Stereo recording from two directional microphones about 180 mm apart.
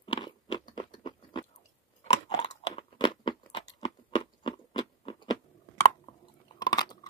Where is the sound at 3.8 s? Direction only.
25° left (ahead or behind).